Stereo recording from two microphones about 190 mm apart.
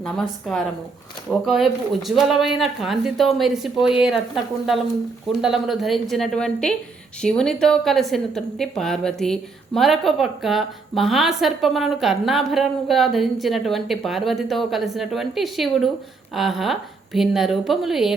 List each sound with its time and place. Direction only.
0.0 s a woman's voice: centre (ahead or behind)
5.4 s a woman's voice: centre (ahead or behind)